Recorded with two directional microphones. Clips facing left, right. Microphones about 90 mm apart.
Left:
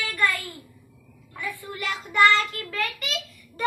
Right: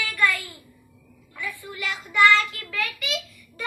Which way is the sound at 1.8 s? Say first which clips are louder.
Even; 40° left (ahead or behind).